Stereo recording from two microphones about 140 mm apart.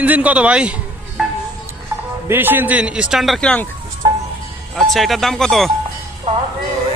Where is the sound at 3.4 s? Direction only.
10° left (ahead or behind).